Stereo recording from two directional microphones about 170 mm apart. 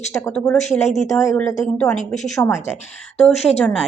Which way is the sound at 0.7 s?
45° left (ahead or behind).